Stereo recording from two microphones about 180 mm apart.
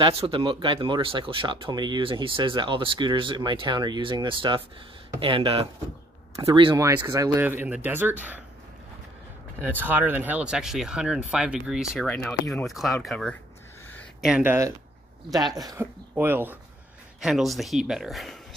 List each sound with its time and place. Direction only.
0.0 s speech: 30° right (ahead or behind); by 8.4 s 10° right (ahead or behind)
9.7 s speech: 10° right (ahead or behind)
14.2 s speech: 10° right (ahead or behind)